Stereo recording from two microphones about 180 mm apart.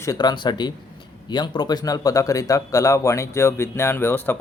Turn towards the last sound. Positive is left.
turn(degrees=10)  # may be behind; listen again after turning